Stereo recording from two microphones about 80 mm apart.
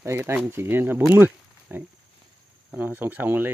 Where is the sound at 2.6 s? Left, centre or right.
Right.